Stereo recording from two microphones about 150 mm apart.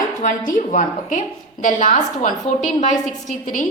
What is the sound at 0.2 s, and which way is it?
A woman's voice, 60° left (ahead or behind).